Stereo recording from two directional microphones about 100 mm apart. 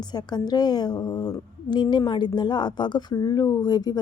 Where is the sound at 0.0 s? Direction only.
45° left (ahead or behind).